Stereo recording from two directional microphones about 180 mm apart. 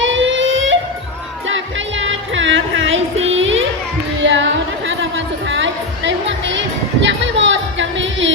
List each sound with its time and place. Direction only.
0.0 s music: 90° right
3.2 s child singing: 90° right
4.2 s music: 90° right